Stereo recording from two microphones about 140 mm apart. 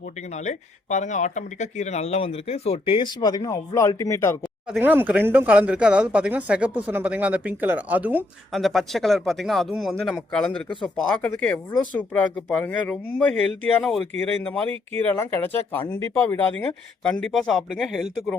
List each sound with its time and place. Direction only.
0.4 s speech: 60° left (ahead or behind); by 4.4 s 20° left (ahead or behind)
4.8 s speech: 15° right (ahead or behind)
8.5 s speech: centre (ahead or behind)